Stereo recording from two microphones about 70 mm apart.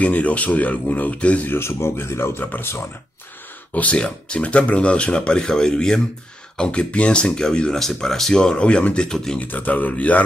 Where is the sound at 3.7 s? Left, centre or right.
Centre.